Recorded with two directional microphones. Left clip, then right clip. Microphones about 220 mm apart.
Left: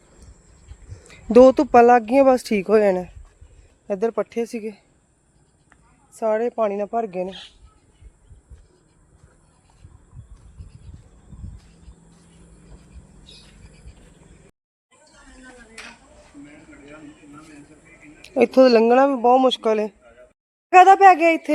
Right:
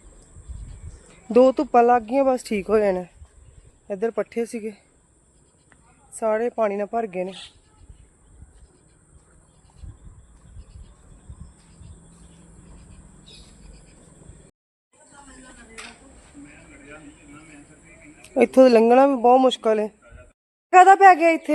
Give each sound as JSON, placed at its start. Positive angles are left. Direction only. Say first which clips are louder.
{"t": 1.0, "sound": "speech", "louder": "left 4 dB", "side_deg": 25}
{"t": 6.1, "sound": "speech", "louder": "left 1 dB", "side_deg": 10}
{"t": 18.2, "sound": "speech", "louder": "even", "side_deg": 0}